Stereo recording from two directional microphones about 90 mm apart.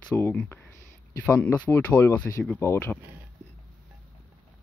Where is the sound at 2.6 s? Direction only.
35° left (ahead or behind).